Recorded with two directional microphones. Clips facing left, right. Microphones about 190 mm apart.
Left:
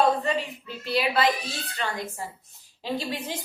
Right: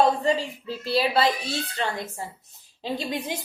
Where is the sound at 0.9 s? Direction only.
30° right (ahead or behind).